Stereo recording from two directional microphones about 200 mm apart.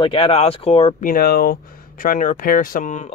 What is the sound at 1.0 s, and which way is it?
Speech, 45° left (ahead or behind).